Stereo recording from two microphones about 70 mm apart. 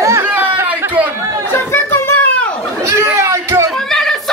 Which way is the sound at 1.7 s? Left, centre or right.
Left.